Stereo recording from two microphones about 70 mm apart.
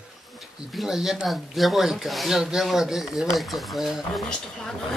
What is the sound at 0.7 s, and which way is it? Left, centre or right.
Speech, centre.